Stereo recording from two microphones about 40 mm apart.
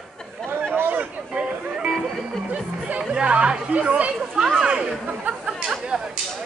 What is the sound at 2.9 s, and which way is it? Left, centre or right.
Chatter, right.